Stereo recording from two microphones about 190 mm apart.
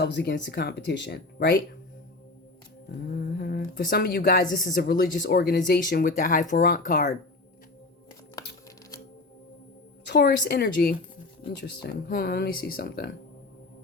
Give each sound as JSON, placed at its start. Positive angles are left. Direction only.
{"t": 0.0, "sound": "speech", "side_deg": 65}
{"t": 3.1, "sound": "speech", "side_deg": 55}
{"t": 10.1, "sound": "a woman's voice", "side_deg": 60}